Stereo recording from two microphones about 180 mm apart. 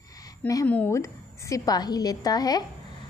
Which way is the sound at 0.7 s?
10° left (ahead or behind).